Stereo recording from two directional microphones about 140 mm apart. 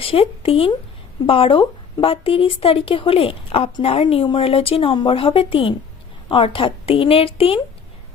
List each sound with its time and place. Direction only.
0.0 s speech: 40° left (ahead or behind)